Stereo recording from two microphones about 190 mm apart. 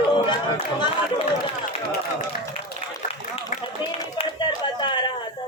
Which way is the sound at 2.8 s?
30° left (ahead or behind).